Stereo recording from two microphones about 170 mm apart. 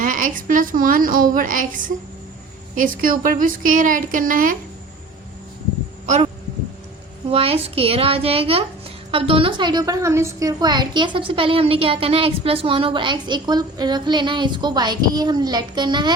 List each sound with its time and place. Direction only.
0.0 s a woman's voice: 50° right (ahead or behind)
7.3 s a child's voice: 35° right (ahead or behind)